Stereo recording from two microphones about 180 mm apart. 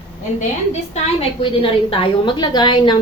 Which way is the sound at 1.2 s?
30° left (ahead or behind).